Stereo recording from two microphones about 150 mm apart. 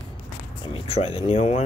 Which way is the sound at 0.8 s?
40° left (ahead or behind).